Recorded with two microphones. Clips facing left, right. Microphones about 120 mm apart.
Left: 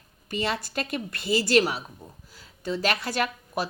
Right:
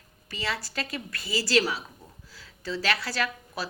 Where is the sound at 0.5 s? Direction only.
55° left (ahead or behind).